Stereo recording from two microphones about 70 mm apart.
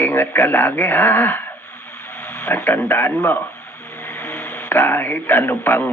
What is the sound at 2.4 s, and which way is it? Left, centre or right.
A man's voice, left.